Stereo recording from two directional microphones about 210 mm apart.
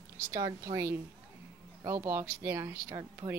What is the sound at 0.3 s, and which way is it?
Speech, 15° right (ahead or behind).